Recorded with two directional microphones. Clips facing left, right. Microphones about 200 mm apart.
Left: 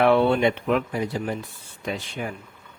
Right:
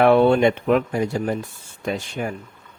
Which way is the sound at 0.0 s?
45° right (ahead or behind).